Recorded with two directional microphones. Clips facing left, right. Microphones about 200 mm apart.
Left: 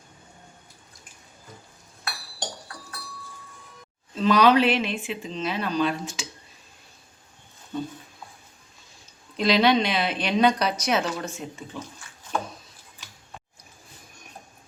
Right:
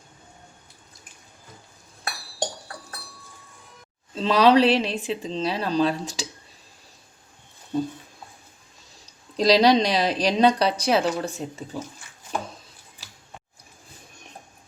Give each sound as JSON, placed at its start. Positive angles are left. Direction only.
{"t": 4.1, "sound": "a woman's voice", "side_deg": -30}
{"t": 9.4, "sound": "a woman's voice", "side_deg": -35}